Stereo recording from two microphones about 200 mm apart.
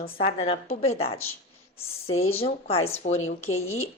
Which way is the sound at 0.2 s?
30° left (ahead or behind).